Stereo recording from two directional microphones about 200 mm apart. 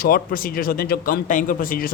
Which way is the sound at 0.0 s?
45° left (ahead or behind).